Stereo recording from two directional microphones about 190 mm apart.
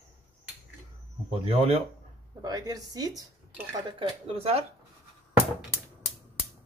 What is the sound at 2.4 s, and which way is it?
A woman's voice, 20° right (ahead or behind).